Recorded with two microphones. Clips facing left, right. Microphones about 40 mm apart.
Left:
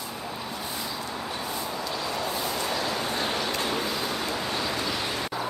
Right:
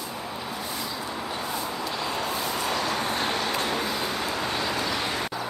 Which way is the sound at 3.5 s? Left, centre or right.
Centre.